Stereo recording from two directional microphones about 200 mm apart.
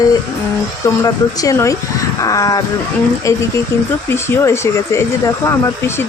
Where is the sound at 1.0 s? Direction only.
15° left (ahead or behind).